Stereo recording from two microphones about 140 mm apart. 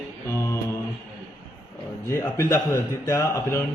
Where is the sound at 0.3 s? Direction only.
20° left (ahead or behind).